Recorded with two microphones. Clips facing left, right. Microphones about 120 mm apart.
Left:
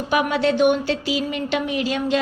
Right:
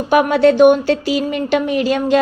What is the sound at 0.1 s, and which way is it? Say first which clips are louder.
Speech: right 8 dB; 50° right (ahead or behind).